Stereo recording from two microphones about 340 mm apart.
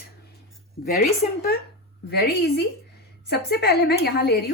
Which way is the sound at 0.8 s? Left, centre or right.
Left.